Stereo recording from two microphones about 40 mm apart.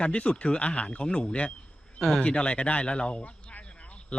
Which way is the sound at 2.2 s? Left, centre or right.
Left.